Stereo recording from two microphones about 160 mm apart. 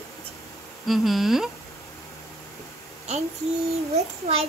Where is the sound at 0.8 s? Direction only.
Centre (ahead or behind).